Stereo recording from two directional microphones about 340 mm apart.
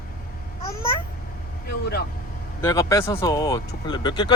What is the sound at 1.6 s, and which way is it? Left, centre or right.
Speech, left.